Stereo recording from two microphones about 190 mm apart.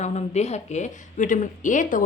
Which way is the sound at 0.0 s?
35° left (ahead or behind).